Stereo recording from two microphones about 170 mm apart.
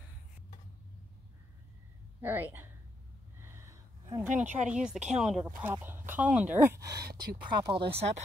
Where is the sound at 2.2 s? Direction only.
10° right (ahead or behind).